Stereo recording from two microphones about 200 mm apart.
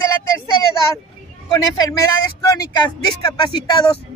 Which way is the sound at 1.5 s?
15° left (ahead or behind).